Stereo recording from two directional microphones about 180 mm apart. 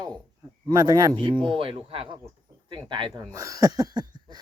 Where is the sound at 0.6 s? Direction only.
20° right (ahead or behind).